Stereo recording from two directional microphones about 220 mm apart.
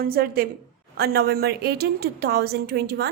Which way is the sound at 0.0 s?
40° right (ahead or behind).